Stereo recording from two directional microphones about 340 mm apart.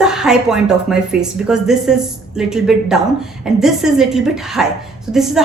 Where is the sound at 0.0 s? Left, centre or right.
Centre.